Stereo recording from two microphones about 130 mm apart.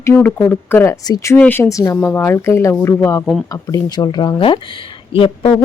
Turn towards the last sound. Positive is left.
turn(degrees=45)  # may be behind; listen again after turning